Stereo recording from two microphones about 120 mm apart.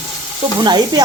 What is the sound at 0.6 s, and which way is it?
Stir, 35° right (ahead or behind).